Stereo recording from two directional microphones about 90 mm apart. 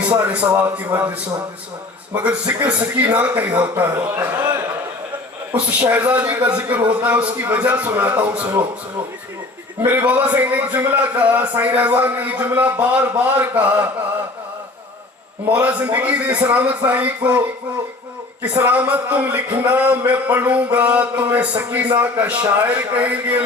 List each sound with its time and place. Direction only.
0.1 s a man's voice: 15° right (ahead or behind)
2.1 s a man's voice: 15° right (ahead or behind)
5.5 s a man's voice: 15° right (ahead or behind)
9.8 s a man's voice: 15° right (ahead or behind)
15.4 s a man's voice: 15° right (ahead or behind)
18.4 s a man's voice: 15° right (ahead or behind)